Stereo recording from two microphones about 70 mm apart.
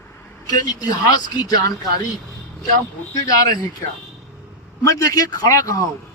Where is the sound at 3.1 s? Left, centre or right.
Left.